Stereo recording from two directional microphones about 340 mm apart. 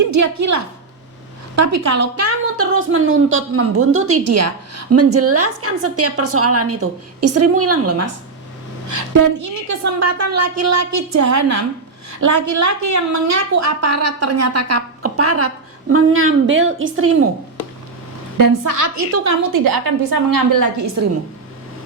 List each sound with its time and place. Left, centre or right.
0.1 s a woman's voice: right
8.9 s a woman's voice: right
18.3 s a woman's voice: right